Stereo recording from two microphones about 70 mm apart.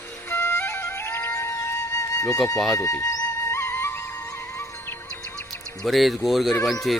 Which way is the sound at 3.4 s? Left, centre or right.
Left.